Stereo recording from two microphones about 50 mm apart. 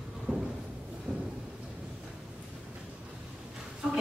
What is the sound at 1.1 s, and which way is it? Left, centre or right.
Thunder, right.